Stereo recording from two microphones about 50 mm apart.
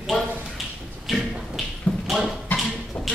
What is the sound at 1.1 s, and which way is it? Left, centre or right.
Tap, centre.